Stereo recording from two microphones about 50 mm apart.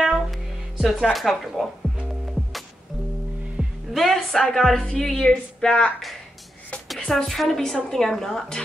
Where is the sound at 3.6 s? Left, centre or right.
Centre.